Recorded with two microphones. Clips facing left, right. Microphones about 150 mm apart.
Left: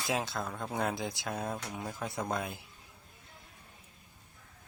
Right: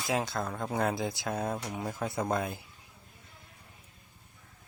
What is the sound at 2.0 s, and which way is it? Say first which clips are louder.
Speech: right 4 dB; centre (ahead or behind).